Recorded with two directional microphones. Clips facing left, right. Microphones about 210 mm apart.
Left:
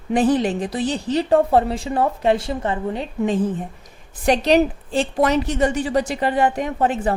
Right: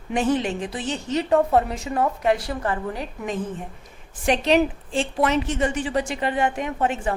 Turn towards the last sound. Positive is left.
turn(degrees=35)  # may be behind; listen again after turning